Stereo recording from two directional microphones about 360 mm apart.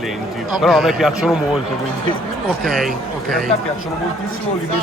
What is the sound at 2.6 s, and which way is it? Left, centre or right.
Speech, centre.